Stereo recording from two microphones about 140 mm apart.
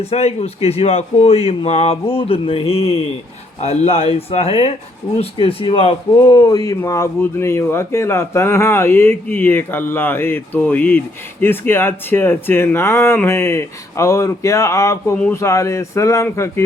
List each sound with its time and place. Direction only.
0.0 s speech: 50° left (ahead or behind)
6.1 s speech: 25° left (ahead or behind)